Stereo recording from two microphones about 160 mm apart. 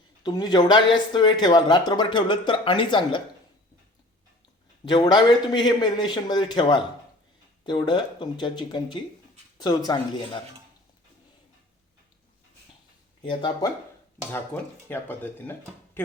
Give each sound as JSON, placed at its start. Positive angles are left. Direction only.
{"t": 0.2, "sound": "speech", "side_deg": 25}
{"t": 4.9, "sound": "speech", "side_deg": 25}
{"t": 13.2, "sound": "speech", "side_deg": 30}
{"t": 14.3, "sound": "speech", "side_deg": 15}